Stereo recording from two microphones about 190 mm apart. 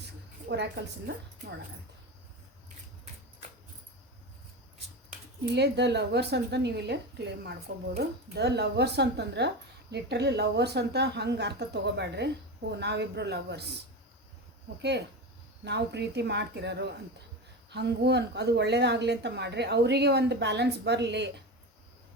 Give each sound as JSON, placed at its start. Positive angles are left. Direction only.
{"t": 0.0, "sound": "a woman's voice", "side_deg": -65}
{"t": 5.5, "sound": "a woman's voice", "side_deg": -60}
{"t": 14.8, "sound": "a woman's voice", "side_deg": -65}